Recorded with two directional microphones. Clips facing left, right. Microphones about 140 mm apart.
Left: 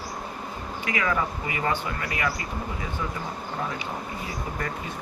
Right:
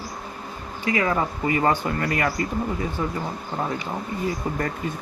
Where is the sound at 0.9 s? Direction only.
35° right (ahead or behind).